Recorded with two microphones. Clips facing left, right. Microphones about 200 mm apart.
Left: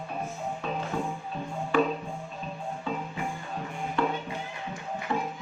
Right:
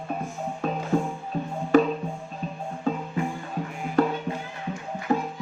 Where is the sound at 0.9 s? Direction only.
45° right (ahead or behind).